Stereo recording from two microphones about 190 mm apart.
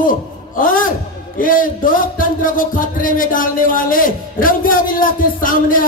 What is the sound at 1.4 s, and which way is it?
Speech, 45° left (ahead or behind).